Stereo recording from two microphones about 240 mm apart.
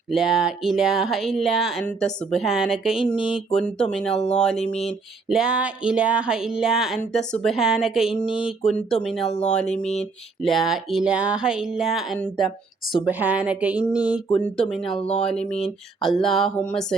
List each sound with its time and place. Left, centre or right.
0.1 s speech: centre
4.6 s speech: left
5.3 s speech: centre